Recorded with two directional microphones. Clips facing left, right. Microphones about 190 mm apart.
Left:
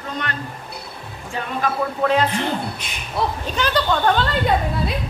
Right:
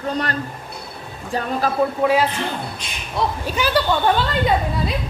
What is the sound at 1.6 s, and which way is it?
Speech, 30° right (ahead or behind).